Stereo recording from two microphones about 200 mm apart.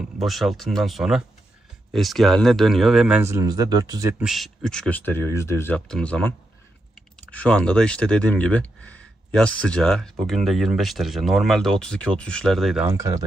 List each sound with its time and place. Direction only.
0.2 s speech: centre (ahead or behind)
3.2 s speech: 15° right (ahead or behind)
4.2 s speech: centre (ahead or behind)
12.9 s speech: 15° right (ahead or behind)